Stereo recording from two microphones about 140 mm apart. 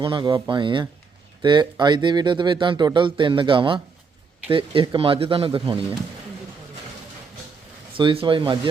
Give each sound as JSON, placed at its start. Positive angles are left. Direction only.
{"t": 0.0, "sound": "speech", "side_deg": -35}
{"t": 7.9, "sound": "speech", "side_deg": -35}